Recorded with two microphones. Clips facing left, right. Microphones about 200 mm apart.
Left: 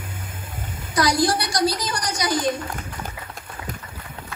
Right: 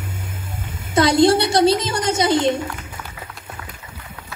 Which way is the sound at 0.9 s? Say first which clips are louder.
Right 7 dB; 25° right (ahead or behind).